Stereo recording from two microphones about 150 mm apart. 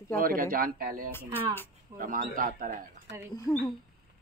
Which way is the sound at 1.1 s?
15° left (ahead or behind).